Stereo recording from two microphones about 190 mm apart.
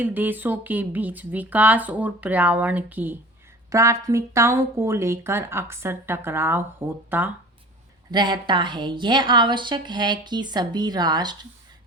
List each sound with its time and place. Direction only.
0.0 s speech: 10° right (ahead or behind)
8.1 s a woman's voice: 25° right (ahead or behind)